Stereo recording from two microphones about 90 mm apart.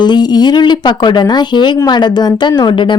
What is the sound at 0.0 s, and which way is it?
A woman's voice, 55° left (ahead or behind).